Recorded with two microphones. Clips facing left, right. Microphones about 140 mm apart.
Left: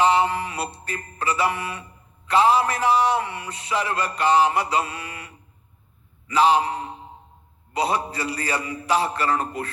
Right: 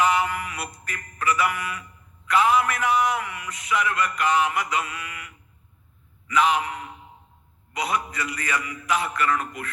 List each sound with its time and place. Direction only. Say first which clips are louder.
0.0 s music: left 3 dB; 30° left (ahead or behind)
6.2 s a man's voice: left 4 dB; 30° left (ahead or behind)
7.7 s music: left 4 dB; 30° left (ahead or behind)